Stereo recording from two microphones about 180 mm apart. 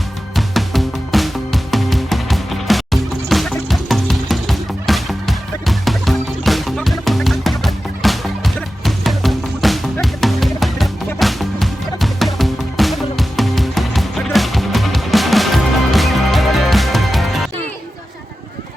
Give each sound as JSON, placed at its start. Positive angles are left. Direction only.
{"t": 0.3, "sound": "music", "side_deg": 0}